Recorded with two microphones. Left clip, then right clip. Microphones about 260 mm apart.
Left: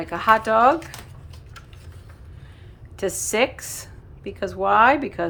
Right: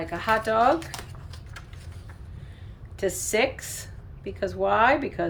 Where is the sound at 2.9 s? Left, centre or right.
Centre.